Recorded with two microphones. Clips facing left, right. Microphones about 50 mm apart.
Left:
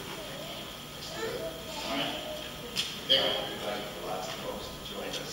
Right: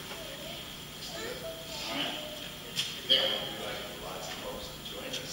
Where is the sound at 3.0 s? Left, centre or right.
Centre.